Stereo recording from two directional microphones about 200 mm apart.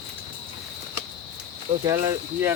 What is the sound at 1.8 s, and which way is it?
Speech, 20° right (ahead or behind).